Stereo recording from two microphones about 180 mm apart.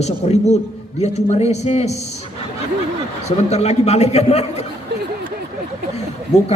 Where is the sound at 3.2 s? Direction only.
35° left (ahead or behind).